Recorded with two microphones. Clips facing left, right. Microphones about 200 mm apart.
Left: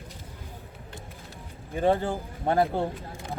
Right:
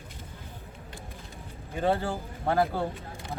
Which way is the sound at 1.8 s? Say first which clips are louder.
Left 3 dB; 15° left (ahead or behind).